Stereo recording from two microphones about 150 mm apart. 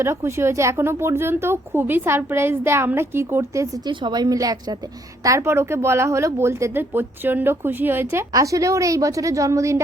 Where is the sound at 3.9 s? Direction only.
30° right (ahead or behind).